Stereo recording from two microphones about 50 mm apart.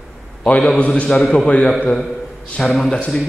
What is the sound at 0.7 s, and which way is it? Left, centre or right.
A man's voice, left.